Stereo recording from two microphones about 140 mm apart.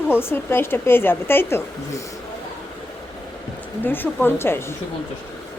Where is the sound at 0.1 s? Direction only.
15° left (ahead or behind).